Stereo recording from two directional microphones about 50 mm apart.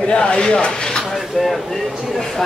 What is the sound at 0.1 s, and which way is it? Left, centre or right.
Speech, centre.